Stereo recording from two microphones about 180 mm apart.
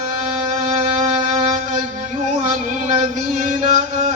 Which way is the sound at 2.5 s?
40° right (ahead or behind).